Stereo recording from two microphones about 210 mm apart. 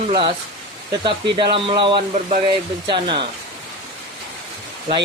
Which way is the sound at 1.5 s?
25° right (ahead or behind).